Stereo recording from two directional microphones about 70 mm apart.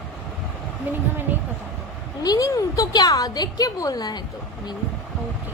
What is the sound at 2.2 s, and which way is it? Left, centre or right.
A woman's voice, left.